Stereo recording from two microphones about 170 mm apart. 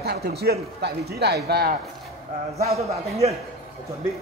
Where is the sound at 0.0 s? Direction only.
70° right (ahead or behind).